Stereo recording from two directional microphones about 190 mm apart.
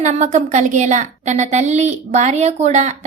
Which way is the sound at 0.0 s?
40° right (ahead or behind).